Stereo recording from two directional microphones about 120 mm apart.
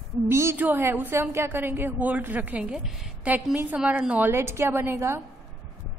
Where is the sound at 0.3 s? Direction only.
20° right (ahead or behind).